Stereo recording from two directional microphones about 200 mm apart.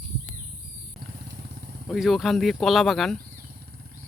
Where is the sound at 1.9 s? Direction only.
Centre (ahead or behind).